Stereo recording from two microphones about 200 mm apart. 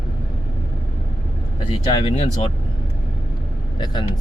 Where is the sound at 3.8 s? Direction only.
20° left (ahead or behind).